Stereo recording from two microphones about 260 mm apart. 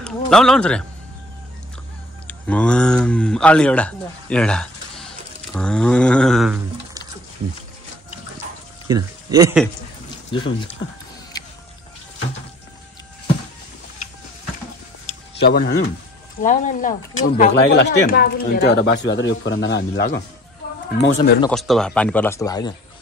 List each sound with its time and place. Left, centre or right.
0.0 s speech: centre
2.2 s speech: centre
8.8 s speech: centre
10.3 s speech: centre
15.3 s speech: left
16.3 s speech: left
17.4 s speech: left
21.5 s speech: centre